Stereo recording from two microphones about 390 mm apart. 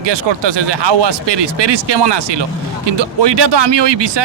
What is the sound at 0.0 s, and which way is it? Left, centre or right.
A man's voice, right.